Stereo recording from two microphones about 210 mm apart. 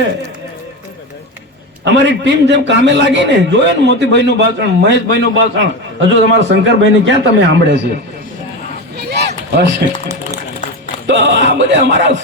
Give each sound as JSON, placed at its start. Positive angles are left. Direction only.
{"t": 1.8, "sound": "a man's voice", "side_deg": -60}
{"t": 9.0, "sound": "a sound", "side_deg": -50}
{"t": 11.0, "sound": "a man's voice", "side_deg": -55}